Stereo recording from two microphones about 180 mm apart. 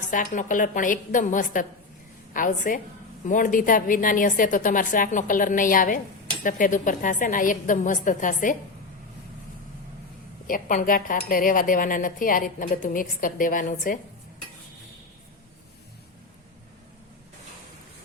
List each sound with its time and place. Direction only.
0.1 s speech: 45° left (ahead or behind)
10.4 s speech: 50° left (ahead or behind)